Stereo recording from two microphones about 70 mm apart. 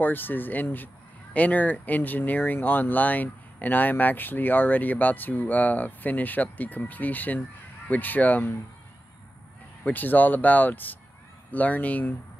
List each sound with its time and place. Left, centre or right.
0.0 s speech: left
9.8 s speech: left